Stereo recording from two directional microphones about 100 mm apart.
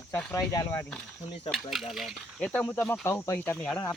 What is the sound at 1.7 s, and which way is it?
Speech, 5° right (ahead or behind).